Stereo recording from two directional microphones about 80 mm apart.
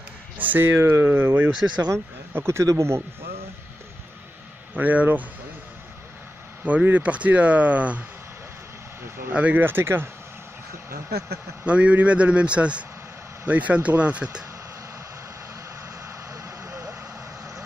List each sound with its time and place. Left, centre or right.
0.4 s speech: right
1.9 s speech: right
4.7 s speech: right
6.6 s speech: centre
9.3 s speech: centre
11.6 s speech: centre
16.4 s vehicle: right